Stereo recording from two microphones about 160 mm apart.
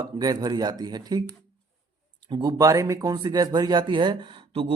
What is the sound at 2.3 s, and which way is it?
Speech, 25° right (ahead or behind).